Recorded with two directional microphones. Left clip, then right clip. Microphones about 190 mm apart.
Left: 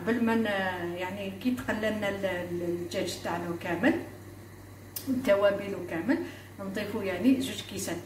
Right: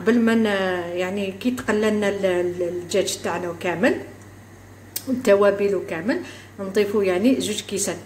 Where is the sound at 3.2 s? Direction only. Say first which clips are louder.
Right 7 dB; 55° right (ahead or behind).